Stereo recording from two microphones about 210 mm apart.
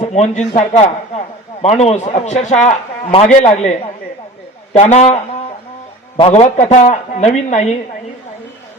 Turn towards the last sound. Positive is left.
turn(degrees=35)  # may be behind; listen again after turning